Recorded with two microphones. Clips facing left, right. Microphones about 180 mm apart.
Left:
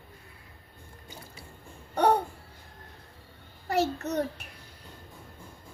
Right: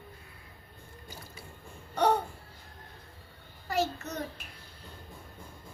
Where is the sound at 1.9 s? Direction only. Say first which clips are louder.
Left 3 dB; 55° left (ahead or behind).